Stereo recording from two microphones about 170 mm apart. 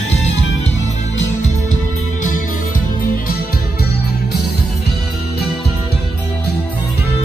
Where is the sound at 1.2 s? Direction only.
45° left (ahead or behind).